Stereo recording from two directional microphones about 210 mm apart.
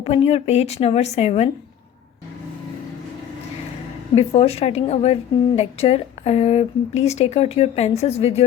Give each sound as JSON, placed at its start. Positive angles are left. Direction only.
{"t": 0.0, "sound": "a woman's voice", "side_deg": 30}
{"t": 4.1, "sound": "a woman's voice", "side_deg": 30}